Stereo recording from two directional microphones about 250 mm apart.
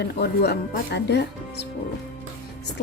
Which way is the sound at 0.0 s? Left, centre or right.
Left.